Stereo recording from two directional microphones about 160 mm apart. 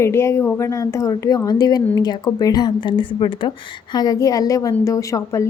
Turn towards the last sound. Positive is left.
turn(degrees=20)  # may be behind; listen again after turning